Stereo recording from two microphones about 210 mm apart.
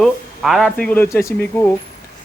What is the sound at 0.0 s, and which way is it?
Speech, centre (ahead or behind).